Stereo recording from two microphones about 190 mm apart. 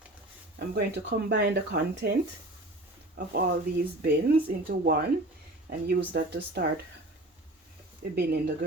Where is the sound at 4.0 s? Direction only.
50° right (ahead or behind).